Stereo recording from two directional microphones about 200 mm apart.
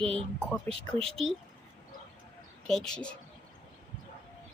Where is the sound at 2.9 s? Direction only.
5° left (ahead or behind).